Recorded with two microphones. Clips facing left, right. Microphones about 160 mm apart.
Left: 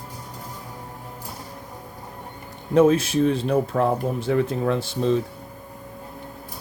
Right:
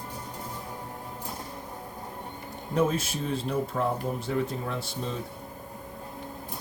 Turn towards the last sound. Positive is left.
turn(degrees=90)